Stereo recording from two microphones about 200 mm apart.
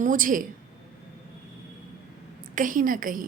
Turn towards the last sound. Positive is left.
turn(degrees=-45)  # may be behind; listen again after turning